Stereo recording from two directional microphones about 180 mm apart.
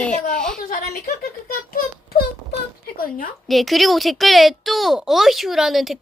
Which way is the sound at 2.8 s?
55° left (ahead or behind).